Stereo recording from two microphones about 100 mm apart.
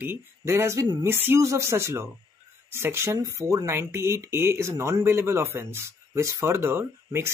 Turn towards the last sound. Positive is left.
turn(degrees=-25)  # may be behind; listen again after turning